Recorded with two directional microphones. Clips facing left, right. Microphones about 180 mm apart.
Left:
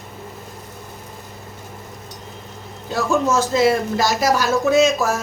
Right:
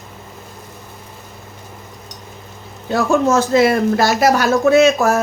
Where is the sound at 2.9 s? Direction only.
60° right (ahead or behind).